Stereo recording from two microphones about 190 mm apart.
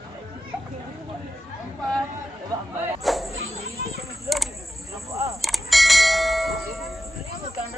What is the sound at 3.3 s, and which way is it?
Insect, 90° right.